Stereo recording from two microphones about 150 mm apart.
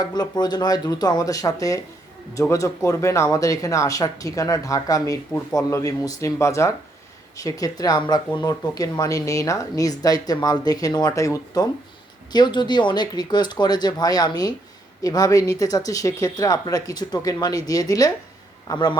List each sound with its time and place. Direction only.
0.0 s speech: 30° left (ahead or behind)